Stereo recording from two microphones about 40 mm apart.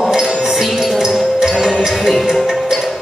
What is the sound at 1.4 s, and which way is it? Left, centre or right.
Music, centre.